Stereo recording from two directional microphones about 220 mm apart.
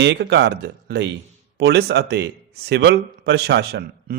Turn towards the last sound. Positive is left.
turn(degrees=-50)  # may be behind; listen again after turning